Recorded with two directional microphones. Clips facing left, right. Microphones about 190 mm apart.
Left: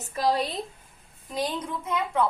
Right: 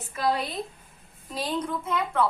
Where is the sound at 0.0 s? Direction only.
35° left (ahead or behind).